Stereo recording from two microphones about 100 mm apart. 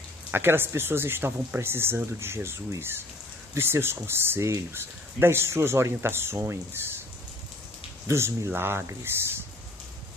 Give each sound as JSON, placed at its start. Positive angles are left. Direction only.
{"t": 0.3, "sound": "speech", "side_deg": -25}
{"t": 8.1, "sound": "speech", "side_deg": -25}